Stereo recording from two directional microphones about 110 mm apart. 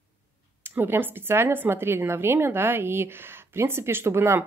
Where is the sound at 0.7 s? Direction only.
20° right (ahead or behind).